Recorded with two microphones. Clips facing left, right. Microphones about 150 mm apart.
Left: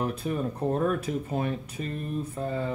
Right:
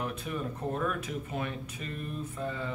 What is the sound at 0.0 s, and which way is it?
Speech, 35° left (ahead or behind).